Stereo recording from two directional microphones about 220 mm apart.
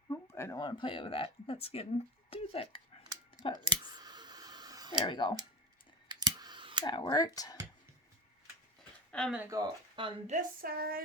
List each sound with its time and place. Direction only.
0.1 s speech: 10° left (ahead or behind)
3.6 s clicking: 20° right (ahead or behind)
5.0 s speech: 20° left (ahead or behind)
6.1 s computer keyboard: 20° right (ahead or behind)
6.8 s speech: 20° left (ahead or behind)
9.1 s speech: centre (ahead or behind)
9.4 s speech: 15° right (ahead or behind)
10.3 s a sound: 40° right (ahead or behind)